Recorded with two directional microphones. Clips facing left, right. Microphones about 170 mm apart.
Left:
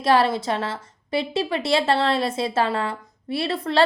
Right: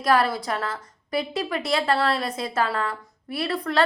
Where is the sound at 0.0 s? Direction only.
25° left (ahead or behind).